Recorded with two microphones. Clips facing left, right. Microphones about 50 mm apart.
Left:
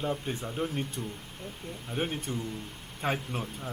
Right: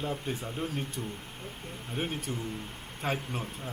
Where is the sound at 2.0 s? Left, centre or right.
Left.